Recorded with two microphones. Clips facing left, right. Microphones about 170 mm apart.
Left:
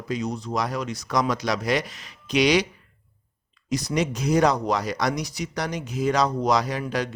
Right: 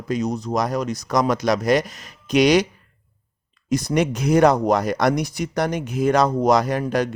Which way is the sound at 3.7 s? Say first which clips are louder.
Right 5 dB; 50° right (ahead or behind).